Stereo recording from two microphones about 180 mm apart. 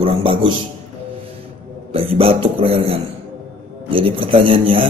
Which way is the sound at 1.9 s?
30° right (ahead or behind).